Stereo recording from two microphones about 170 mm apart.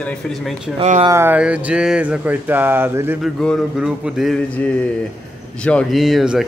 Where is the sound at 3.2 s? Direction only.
Centre (ahead or behind).